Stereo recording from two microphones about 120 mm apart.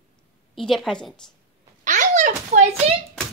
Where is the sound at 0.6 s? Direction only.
Centre (ahead or behind).